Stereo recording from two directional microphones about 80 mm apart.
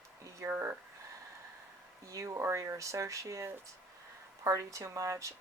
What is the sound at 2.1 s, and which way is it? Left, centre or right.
Speech, right.